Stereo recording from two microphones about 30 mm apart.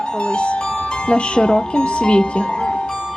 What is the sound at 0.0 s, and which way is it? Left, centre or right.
A woman's voice, left.